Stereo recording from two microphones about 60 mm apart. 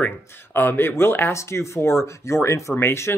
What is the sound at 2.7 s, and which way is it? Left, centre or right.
Speech, left.